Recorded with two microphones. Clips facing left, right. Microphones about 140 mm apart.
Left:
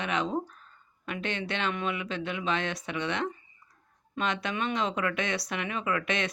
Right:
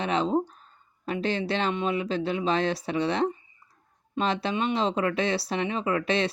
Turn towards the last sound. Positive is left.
turn(degrees=-30)  # may be behind; listen again after turning